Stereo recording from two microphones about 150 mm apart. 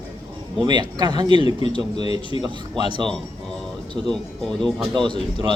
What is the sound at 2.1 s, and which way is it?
Speech, 40° left (ahead or behind).